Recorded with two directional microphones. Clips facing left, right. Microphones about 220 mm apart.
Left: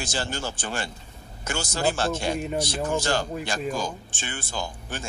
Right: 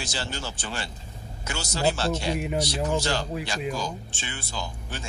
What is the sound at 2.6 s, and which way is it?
Speech, 50° left (ahead or behind).